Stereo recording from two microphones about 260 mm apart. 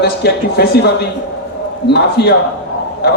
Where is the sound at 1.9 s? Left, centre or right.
Left.